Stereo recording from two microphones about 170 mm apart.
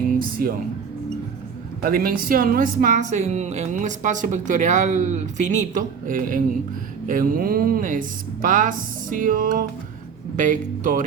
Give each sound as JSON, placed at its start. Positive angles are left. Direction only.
{"t": 0.4, "sound": "speech", "side_deg": -60}
{"t": 1.8, "sound": "a woman's voice", "side_deg": -60}